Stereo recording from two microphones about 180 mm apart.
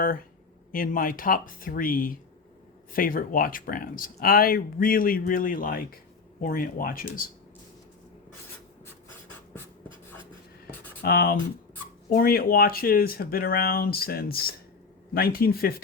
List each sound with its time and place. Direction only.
0.7 s speech: 50° left (ahead or behind)
11.0 s speech: 55° left (ahead or behind)